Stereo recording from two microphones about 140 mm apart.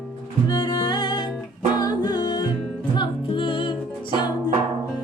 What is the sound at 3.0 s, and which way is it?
Music, 35° left (ahead or behind).